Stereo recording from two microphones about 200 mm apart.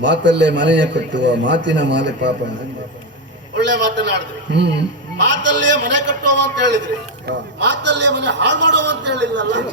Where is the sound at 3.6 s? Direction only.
60° right (ahead or behind).